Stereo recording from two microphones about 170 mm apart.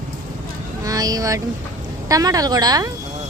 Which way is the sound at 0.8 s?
20° right (ahead or behind).